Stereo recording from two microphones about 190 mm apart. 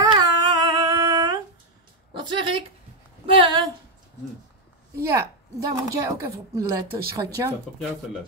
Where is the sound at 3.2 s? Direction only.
25° right (ahead or behind).